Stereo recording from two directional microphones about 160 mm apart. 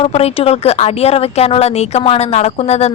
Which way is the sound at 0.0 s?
40° left (ahead or behind).